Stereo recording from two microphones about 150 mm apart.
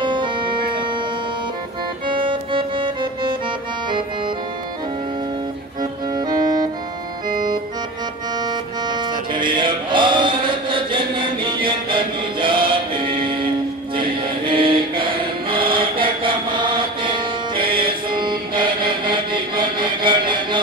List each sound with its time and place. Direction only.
0.0 s music: 30° right (ahead or behind)
2.0 s music: 35° right (ahead or behind)
5.8 s music: 25° right (ahead or behind)
7.2 s organ: 65° right (ahead or behind)
8.5 s music: 30° right (ahead or behind)
9.3 s chant: 30° right (ahead or behind)
13.9 s music: 35° right (ahead or behind)
15.7 s chant: 35° right (ahead or behind)